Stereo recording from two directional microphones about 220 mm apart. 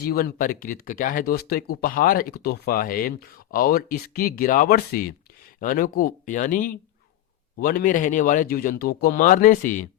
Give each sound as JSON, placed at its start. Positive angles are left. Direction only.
{"t": 0.0, "sound": "speech", "side_deg": 45}